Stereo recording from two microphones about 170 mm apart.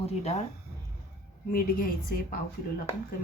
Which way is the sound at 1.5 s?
55° left (ahead or behind).